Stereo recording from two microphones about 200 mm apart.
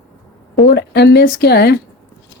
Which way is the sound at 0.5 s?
55° left (ahead or behind).